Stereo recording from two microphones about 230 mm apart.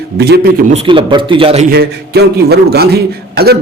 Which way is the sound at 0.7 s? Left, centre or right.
Right.